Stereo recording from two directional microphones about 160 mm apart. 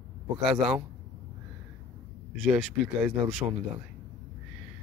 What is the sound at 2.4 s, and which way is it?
Speech, centre (ahead or behind).